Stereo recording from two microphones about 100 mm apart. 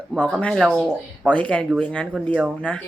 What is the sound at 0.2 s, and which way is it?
A woman's voice, 10° left (ahead or behind).